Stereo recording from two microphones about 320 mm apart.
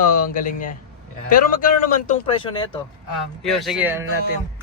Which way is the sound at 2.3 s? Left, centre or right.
Centre.